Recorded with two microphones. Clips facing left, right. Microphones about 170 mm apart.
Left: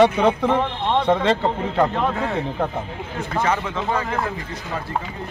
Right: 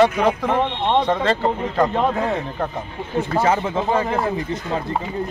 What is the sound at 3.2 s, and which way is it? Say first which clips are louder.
Speech: right 4 dB; 30° right (ahead or behind).